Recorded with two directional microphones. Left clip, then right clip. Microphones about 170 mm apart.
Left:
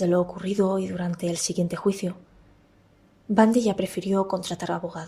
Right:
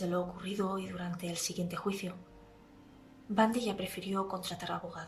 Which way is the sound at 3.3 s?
40° left (ahead or behind).